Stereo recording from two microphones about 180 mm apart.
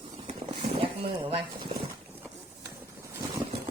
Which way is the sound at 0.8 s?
30° right (ahead or behind).